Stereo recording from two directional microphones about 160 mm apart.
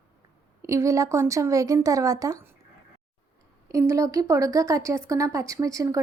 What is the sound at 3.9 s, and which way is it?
A woman's voice, 20° right (ahead or behind).